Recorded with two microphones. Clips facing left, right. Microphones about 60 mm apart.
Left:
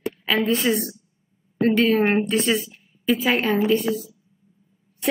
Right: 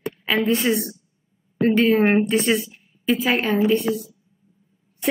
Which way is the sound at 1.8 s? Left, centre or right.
Centre.